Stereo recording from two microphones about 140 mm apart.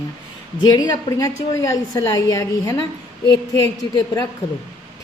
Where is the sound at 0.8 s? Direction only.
25° left (ahead or behind).